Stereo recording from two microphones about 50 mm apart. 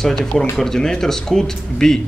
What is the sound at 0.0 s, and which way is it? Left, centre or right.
Speech, centre.